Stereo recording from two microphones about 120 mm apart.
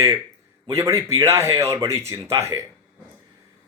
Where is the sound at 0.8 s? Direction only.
25° right (ahead or behind).